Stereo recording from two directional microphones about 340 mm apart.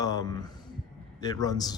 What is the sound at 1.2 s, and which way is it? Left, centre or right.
Speech, centre.